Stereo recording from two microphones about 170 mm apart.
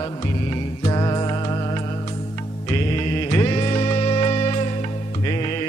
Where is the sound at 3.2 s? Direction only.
25° left (ahead or behind).